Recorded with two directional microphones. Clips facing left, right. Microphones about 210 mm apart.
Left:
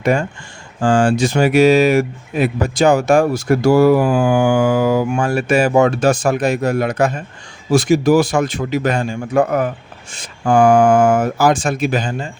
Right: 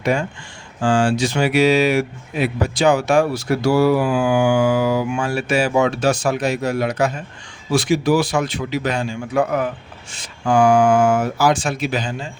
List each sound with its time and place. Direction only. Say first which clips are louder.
0.0 s speech: left 3 dB; 50° left (ahead or behind)